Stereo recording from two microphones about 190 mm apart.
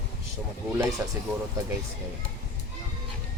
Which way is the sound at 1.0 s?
15° right (ahead or behind).